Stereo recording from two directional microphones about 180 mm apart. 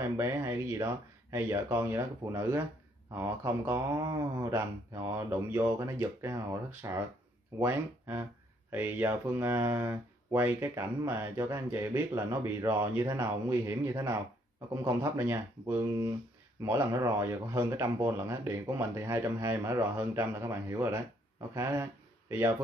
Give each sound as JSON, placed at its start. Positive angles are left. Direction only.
{"t": 0.0, "sound": "speech", "side_deg": -15}